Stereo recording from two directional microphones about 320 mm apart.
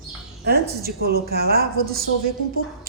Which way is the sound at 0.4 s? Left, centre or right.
Right.